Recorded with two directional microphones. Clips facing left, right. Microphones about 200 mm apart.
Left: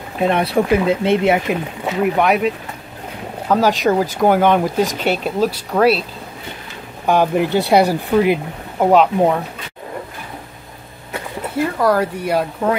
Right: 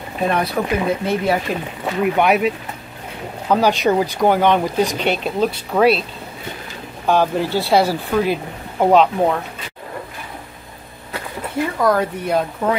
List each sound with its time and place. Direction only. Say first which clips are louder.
0.2 s speech: left 3 dB; 25° left (ahead or behind)
1.9 s speech: even; centre (ahead or behind)
7.1 s speech: left 2 dB; 15° left (ahead or behind)
11.8 s speech: even; 10° left (ahead or behind)